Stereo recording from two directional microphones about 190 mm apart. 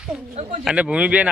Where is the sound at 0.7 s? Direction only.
5° right (ahead or behind).